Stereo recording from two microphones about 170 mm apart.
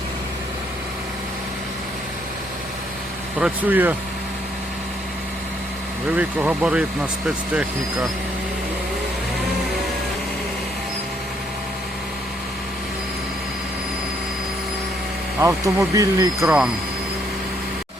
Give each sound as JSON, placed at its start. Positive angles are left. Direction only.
{"t": 3.4, "sound": "speech", "side_deg": -10}
{"t": 6.1, "sound": "speech", "side_deg": -10}
{"t": 15.4, "sound": "speech", "side_deg": -15}
{"t": 16.4, "sound": "speech", "side_deg": -5}